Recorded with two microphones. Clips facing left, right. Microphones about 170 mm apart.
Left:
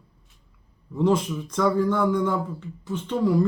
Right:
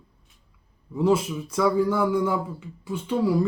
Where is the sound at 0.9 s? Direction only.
5° right (ahead or behind).